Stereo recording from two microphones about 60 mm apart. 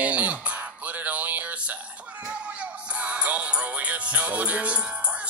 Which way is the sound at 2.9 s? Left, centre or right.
Right.